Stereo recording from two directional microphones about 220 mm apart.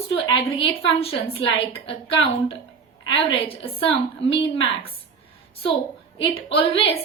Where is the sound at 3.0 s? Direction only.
25° left (ahead or behind).